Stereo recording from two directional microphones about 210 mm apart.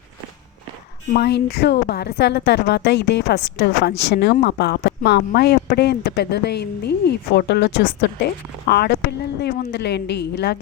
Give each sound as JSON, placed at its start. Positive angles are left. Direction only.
{"t": 1.1, "sound": "a woman's voice", "side_deg": 50}